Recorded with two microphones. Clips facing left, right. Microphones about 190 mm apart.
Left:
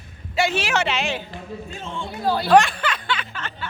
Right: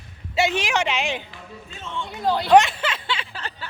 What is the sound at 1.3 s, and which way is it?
Speech, 50° left (ahead or behind).